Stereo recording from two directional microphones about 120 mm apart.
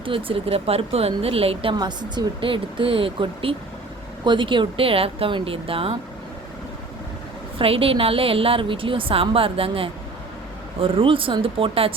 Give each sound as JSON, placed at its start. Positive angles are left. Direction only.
{"t": 0.0, "sound": "a woman's voice", "side_deg": -45}
{"t": 1.7, "sound": "a woman's voice", "side_deg": -35}
{"t": 7.6, "sound": "a woman's voice", "side_deg": -50}